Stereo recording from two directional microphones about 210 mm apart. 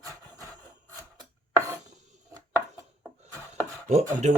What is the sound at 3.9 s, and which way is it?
Chopping, 35° right (ahead or behind).